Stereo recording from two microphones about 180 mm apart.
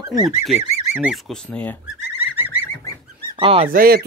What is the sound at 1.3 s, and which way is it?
Speech, 5° left (ahead or behind).